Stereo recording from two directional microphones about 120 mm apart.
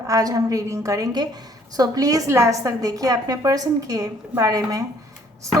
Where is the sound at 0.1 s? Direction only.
30° right (ahead or behind).